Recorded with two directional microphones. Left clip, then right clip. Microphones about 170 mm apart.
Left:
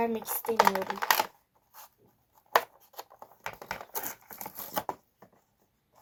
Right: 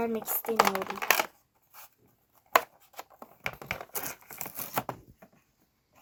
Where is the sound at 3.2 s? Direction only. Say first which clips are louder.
Right 4 dB; 35° right (ahead or behind).